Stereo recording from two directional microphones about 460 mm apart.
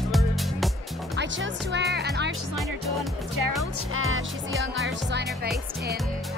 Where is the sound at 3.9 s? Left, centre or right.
Right.